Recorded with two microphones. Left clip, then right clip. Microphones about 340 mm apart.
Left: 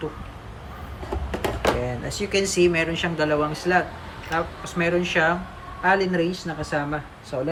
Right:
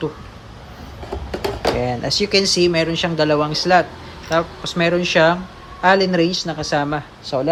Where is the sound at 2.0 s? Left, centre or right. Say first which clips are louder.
Right 8 dB; centre.